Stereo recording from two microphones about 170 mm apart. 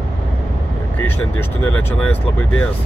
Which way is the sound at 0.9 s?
10° left (ahead or behind).